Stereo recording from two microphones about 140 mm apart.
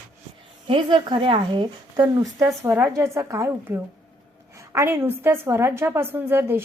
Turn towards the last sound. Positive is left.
turn(degrees=-15)  # may be behind; listen again after turning